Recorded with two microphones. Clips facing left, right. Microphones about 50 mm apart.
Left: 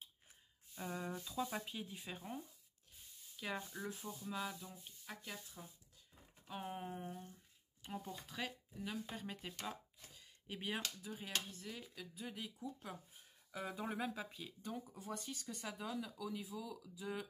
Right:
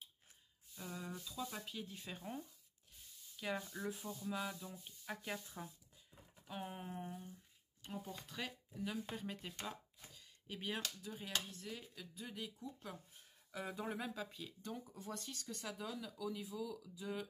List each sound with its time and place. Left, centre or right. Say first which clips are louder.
0.7 s a sound: left 4 dB; left
1.1 s speech: left 4 dB; left; by 4.7 s centre
5.2 s speech: right 5 dB; right
6.4 s speech: left 2 dB; centre